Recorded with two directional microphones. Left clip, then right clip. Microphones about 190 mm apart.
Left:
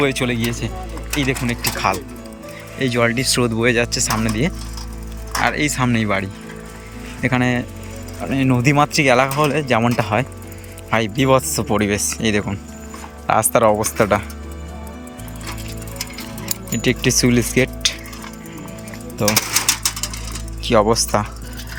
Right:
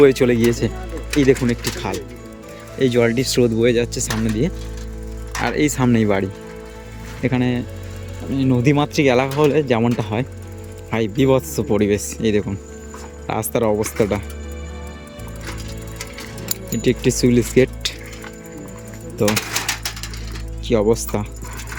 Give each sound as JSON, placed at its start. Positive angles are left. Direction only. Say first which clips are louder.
{"t": 0.0, "sound": "speech", "louder": "right 6 dB", "side_deg": -20}
{"t": 1.8, "sound": "speech", "louder": "left 6 dB", "side_deg": -5}
{"t": 16.7, "sound": "speech", "louder": "left 1 dB", "side_deg": -5}
{"t": 19.3, "sound": "a sound", "louder": "left 3 dB", "side_deg": 30}
{"t": 20.7, "sound": "speech", "louder": "left 2 dB", "side_deg": -5}